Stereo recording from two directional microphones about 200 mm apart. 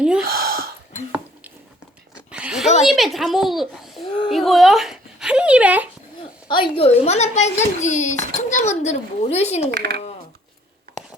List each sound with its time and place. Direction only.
0.0 s speech: 5° right (ahead or behind)
0.3 s a sound: 50° right (ahead or behind)
2.3 s a sound: 5° right (ahead or behind)
2.8 s a child's voice: centre (ahead or behind)
6.5 s speech: 25° left (ahead or behind)
9.7 s speech: 50° right (ahead or behind)